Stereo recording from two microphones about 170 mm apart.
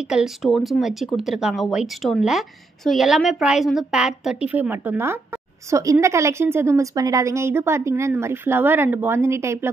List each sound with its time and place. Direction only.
0.1 s a woman's voice: centre (ahead or behind)